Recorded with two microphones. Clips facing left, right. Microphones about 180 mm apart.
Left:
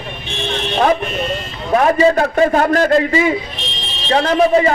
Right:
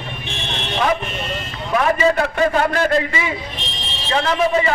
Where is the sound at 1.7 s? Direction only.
35° left (ahead or behind).